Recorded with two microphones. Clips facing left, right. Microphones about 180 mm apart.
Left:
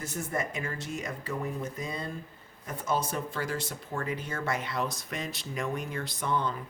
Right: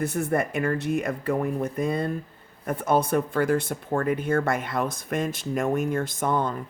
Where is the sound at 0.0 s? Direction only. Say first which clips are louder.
Right 9 dB; 60° right (ahead or behind).